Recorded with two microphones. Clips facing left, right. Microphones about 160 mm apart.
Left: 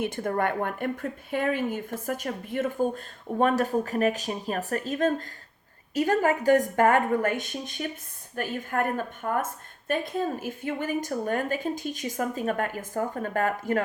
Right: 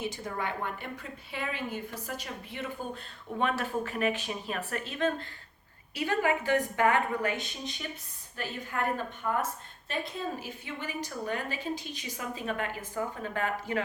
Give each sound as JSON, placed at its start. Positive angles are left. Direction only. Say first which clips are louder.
{"t": 0.0, "sound": "a woman's voice", "louder": "left 8 dB", "side_deg": 55}
{"t": 9.9, "sound": "a woman's voice", "louder": "left 7 dB", "side_deg": 50}